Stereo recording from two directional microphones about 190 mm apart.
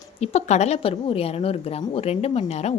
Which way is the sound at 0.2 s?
35° left (ahead or behind).